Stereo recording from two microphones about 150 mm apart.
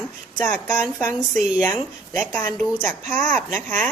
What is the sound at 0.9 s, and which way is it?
A woman's voice, centre (ahead or behind).